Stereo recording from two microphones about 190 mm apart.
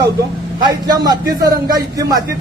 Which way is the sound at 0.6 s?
20° right (ahead or behind).